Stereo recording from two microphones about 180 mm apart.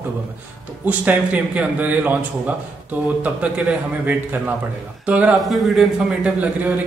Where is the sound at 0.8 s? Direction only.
5° right (ahead or behind).